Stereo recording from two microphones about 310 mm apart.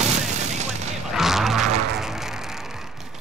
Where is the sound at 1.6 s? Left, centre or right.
Right.